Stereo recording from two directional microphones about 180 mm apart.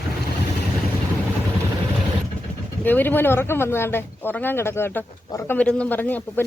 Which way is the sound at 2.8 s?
10° left (ahead or behind).